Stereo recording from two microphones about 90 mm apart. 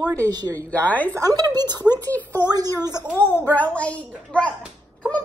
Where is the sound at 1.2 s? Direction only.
45° right (ahead or behind).